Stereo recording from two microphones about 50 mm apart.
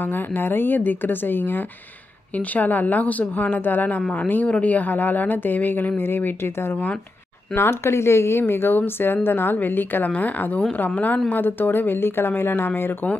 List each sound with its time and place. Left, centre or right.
0.0 s a woman's voice: left